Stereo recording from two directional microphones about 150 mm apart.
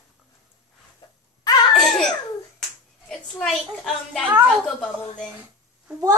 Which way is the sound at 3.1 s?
5° left (ahead or behind).